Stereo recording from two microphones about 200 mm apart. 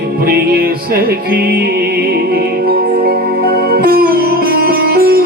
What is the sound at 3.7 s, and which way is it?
Music, 45° right (ahead or behind).